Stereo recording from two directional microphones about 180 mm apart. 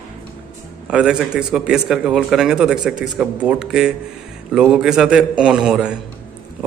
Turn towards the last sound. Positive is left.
turn(degrees=-5)  # may be behind; listen again after turning